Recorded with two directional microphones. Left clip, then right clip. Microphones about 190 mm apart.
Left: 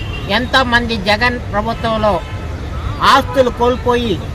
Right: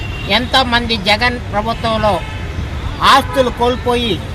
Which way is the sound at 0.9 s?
Centre (ahead or behind).